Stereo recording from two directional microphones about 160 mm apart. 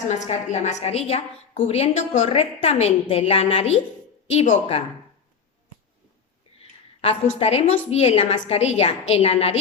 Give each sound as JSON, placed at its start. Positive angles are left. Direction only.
{"t": 0.1, "sound": "a woman's voice", "side_deg": 50}
{"t": 6.6, "sound": "a sound", "side_deg": 40}
{"t": 7.3, "sound": "a woman's voice", "side_deg": 40}